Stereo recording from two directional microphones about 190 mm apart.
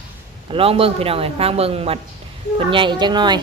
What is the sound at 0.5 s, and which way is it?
Speech, 30° right (ahead or behind).